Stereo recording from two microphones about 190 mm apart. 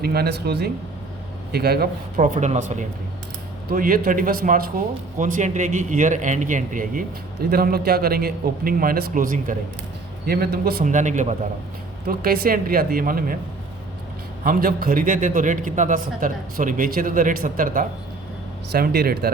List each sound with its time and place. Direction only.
0.0 s speech: 55° right (ahead or behind)
2.2 s a man's voice: 40° right (ahead or behind)
12.0 s a man's voice: 50° right (ahead or behind)
14.4 s a man's voice: 50° right (ahead or behind)